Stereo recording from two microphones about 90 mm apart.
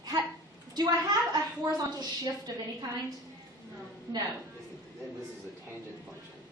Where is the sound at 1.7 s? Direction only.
45° right (ahead or behind).